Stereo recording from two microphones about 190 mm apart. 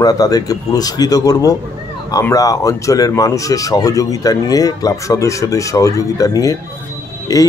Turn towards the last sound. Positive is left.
turn(degrees=20)  # may be behind; listen again after turning